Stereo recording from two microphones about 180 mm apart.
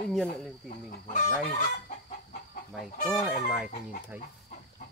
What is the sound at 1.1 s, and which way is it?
Chicken, 45° left (ahead or behind).